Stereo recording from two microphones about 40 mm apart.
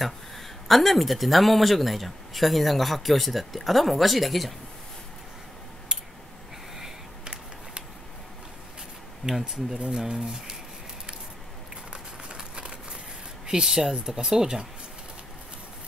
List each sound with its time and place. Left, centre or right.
0.0 s speech: centre
9.3 s speech: centre
11.9 s a sound: right
13.5 s speech: centre